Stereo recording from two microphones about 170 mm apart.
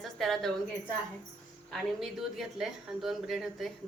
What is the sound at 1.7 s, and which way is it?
Speech, centre (ahead or behind).